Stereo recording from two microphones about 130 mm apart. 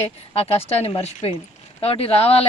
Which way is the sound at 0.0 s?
50° left (ahead or behind).